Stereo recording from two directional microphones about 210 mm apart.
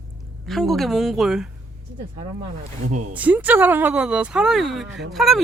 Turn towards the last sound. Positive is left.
turn(degrees=0)  # may be behind; listen again after turning